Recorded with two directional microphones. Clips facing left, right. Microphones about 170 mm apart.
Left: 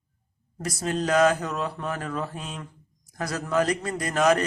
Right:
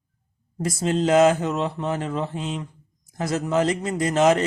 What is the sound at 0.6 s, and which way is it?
Speech, 25° right (ahead or behind).